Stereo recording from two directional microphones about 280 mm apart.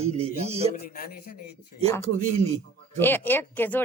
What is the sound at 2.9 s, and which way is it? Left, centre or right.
Speech, centre.